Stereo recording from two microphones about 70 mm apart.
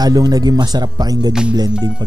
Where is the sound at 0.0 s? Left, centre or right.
Right.